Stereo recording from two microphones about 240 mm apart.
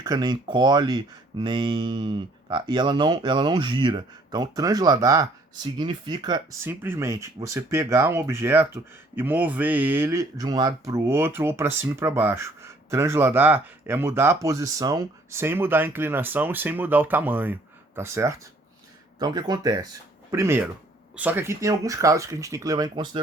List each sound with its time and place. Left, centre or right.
0.0 s speech: centre